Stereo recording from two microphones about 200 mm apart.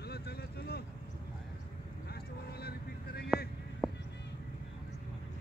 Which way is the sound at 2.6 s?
50° left (ahead or behind).